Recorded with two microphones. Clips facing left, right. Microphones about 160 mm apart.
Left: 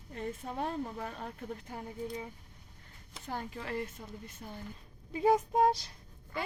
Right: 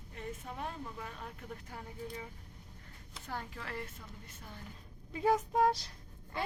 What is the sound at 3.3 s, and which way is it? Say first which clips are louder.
A woman's voice: left 4 dB; 20° left (ahead or behind).